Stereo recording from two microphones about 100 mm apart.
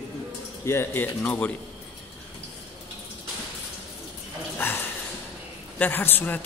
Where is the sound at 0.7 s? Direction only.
25° left (ahead or behind).